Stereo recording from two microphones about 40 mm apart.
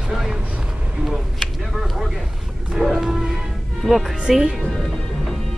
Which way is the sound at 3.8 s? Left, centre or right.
Centre.